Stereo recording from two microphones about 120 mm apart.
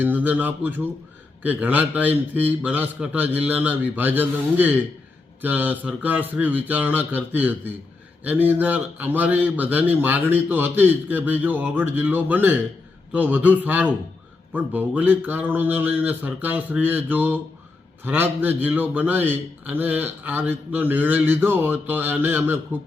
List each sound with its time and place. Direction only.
0.0 s a man's voice: 15° right (ahead or behind)